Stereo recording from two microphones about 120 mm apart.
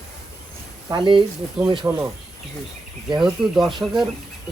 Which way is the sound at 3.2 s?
Centre (ahead or behind).